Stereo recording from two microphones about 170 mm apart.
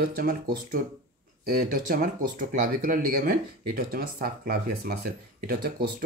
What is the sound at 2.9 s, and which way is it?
Speech, 55° right (ahead or behind).